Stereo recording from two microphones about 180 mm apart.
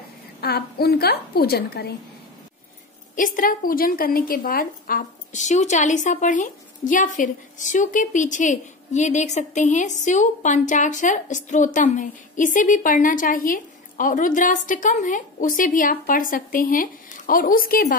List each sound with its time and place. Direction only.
0.4 s a woman's voice: 60° left (ahead or behind)
3.2 s a woman's voice: 50° left (ahead or behind)